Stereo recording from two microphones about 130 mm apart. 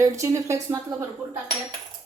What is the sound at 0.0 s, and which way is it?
Speech, 25° right (ahead or behind).